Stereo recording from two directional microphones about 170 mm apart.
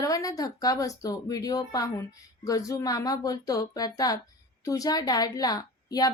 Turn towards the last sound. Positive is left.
turn(degrees=20)  # may be behind; listen again after turning